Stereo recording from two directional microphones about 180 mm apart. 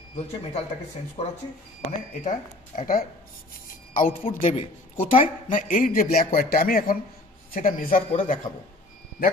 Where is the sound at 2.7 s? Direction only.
50° left (ahead or behind).